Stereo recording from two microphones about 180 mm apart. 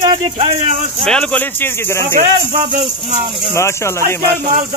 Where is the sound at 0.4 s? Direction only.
30° right (ahead or behind).